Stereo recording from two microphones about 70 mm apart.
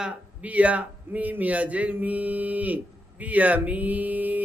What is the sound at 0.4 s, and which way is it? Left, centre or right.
Speech, right.